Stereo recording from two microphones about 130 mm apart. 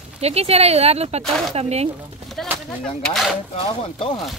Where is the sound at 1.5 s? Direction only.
55° right (ahead or behind).